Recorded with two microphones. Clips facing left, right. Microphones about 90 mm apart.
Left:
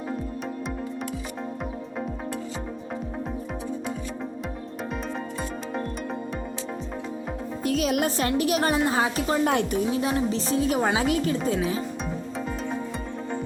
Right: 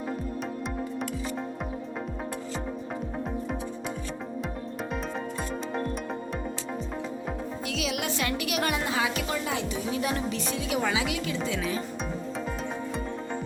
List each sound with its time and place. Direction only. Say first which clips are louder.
4.8 s music: left 2 dB; centre (ahead or behind)
7.6 s speech: left 9 dB; 45° left (ahead or behind)
9.4 s speech: left 8 dB; 50° left (ahead or behind)
9.9 s speech: left 4 dB; 25° left (ahead or behind)
12.0 s music: left 2 dB; centre (ahead or behind)